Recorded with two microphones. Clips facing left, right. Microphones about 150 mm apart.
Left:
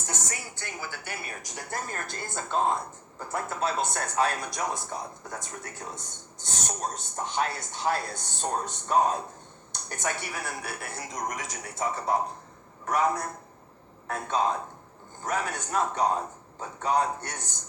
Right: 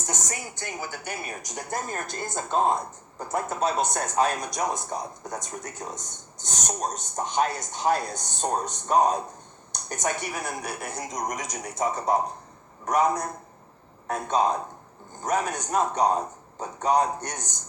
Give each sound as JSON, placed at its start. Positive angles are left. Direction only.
{"t": 0.1, "sound": "a woman's voice", "side_deg": -20}